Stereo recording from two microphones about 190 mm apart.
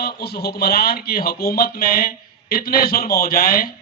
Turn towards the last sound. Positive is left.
turn(degrees=50)  # may be behind; listen again after turning